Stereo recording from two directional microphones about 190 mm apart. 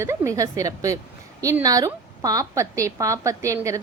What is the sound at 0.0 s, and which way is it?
A woman's voice, 15° right (ahead or behind).